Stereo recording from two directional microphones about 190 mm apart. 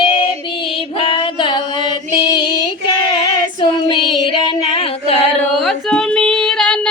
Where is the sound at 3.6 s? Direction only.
25° left (ahead or behind).